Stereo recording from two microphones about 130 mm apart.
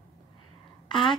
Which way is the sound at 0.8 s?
40° left (ahead or behind).